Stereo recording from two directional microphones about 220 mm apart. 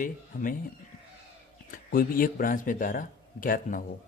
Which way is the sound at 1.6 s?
40° left (ahead or behind).